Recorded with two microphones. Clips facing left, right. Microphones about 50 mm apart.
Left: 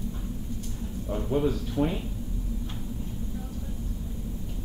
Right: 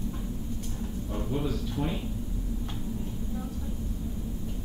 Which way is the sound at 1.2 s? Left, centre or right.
Left.